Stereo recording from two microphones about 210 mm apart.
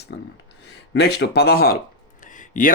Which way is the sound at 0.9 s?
55° left (ahead or behind).